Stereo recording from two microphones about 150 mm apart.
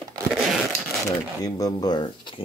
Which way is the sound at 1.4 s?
25° left (ahead or behind).